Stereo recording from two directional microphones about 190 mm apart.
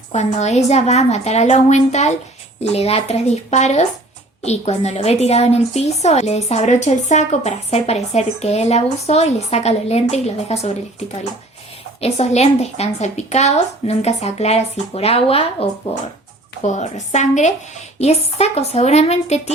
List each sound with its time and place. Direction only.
0.1 s a woman's voice: 35° left (ahead or behind)
11.9 s a woman's voice: 35° left (ahead or behind)
16.6 s a woman's voice: 35° left (ahead or behind)